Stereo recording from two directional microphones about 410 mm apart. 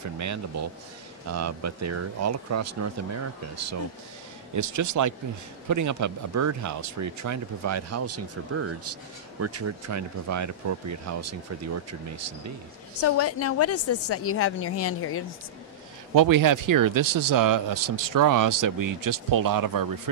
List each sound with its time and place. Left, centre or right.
0.2 s speech: right
13.0 s a woman's voice: left
16.2 s speech: right